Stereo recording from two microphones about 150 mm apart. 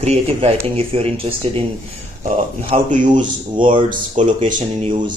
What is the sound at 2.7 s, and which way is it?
Speech, 40° right (ahead or behind).